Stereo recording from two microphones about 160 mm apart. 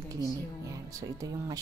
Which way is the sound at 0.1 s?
20° right (ahead or behind).